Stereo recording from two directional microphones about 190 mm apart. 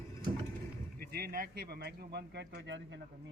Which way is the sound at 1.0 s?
50° right (ahead or behind).